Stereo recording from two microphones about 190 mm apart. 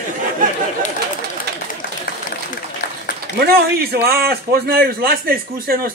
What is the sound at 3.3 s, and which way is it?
A man's voice, 55° right (ahead or behind).